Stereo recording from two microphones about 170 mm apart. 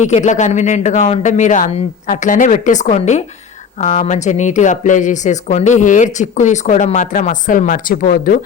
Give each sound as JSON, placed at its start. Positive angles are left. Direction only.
{"t": 0.0, "sound": "speech", "side_deg": 45}